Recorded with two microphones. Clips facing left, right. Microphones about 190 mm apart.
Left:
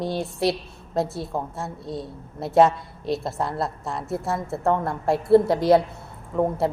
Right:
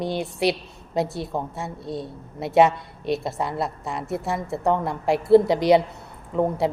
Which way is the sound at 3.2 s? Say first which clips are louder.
Even; centre (ahead or behind).